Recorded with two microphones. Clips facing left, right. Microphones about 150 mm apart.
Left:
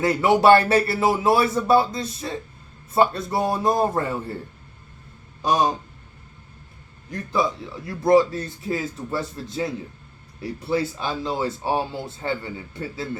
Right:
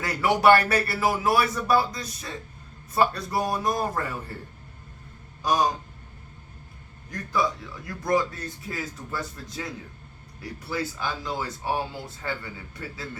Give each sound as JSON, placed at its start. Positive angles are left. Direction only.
{"t": 0.0, "sound": "speech", "side_deg": 25}
{"t": 5.4, "sound": "speech", "side_deg": 25}
{"t": 7.9, "sound": "speech", "side_deg": 30}